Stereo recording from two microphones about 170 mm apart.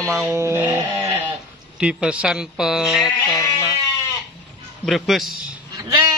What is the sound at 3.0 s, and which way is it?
Sheep, 25° left (ahead or behind).